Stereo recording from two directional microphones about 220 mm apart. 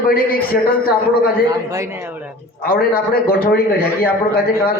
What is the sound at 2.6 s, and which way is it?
A man's voice, 40° left (ahead or behind).